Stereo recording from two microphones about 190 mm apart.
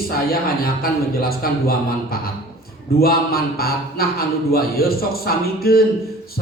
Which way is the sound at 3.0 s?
50° left (ahead or behind).